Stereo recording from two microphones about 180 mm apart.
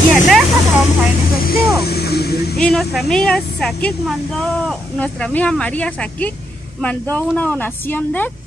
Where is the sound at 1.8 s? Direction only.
60° left (ahead or behind).